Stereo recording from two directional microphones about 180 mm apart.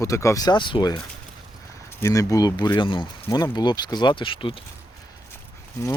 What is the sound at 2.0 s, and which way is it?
Speech, 15° left (ahead or behind).